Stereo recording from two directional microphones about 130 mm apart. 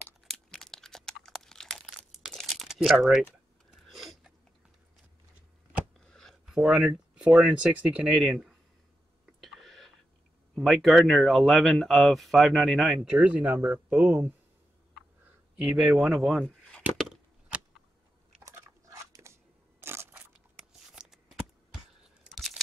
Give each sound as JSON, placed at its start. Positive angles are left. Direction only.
{"t": 0.3, "sound": "crumpling", "side_deg": 5}
{"t": 3.8, "sound": "a sound", "side_deg": 0}
{"t": 5.9, "sound": "a sound", "side_deg": 5}
{"t": 7.6, "sound": "speech", "side_deg": -10}
{"t": 9.4, "sound": "a sound", "side_deg": 0}
{"t": 10.5, "sound": "speech", "side_deg": 0}
{"t": 13.2, "sound": "speech", "side_deg": -10}
{"t": 15.5, "sound": "speech", "side_deg": -5}
{"t": 16.9, "sound": "chop", "side_deg": -5}
{"t": 18.4, "sound": "biting", "side_deg": -25}
{"t": 19.8, "sound": "crushing", "side_deg": -20}
{"t": 20.5, "sound": "a sound", "side_deg": -5}
{"t": 22.2, "sound": "crunch", "side_deg": 0}